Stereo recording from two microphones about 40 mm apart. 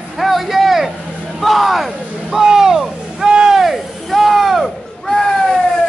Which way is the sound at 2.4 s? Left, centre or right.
Centre.